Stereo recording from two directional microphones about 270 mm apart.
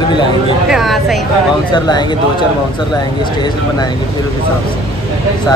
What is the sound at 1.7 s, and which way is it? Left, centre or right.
Speech, centre.